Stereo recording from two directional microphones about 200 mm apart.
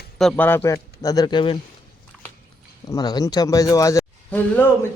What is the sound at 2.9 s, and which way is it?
A man's voice, 20° left (ahead or behind).